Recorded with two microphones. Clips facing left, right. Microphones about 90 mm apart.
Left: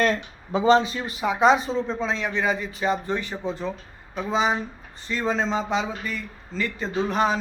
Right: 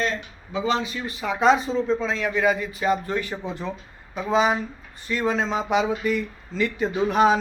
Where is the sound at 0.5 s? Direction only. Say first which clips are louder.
Left 6 dB; 40° left (ahead or behind).